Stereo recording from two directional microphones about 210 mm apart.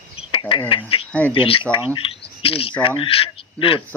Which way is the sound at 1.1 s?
10° left (ahead or behind).